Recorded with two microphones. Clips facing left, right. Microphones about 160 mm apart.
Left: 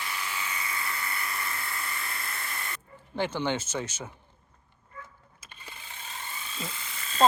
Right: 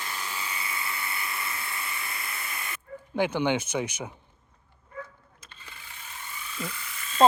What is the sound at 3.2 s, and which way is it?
Speech, 10° right (ahead or behind).